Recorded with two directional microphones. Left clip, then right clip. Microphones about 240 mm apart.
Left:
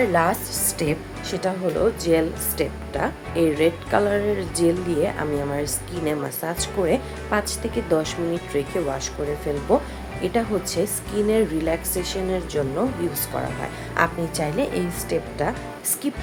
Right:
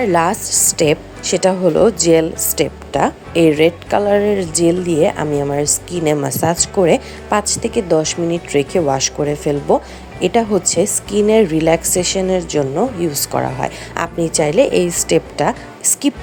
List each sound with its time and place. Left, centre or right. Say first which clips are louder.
0.0 s a woman's voice: right 5 dB; right